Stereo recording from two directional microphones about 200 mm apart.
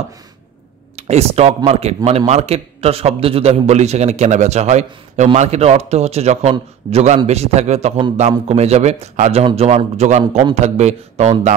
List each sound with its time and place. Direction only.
0.9 s a man's voice: 30° right (ahead or behind)